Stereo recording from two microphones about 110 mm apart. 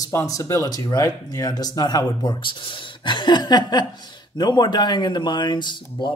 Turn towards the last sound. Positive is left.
turn(degrees=45)  # may be behind; listen again after turning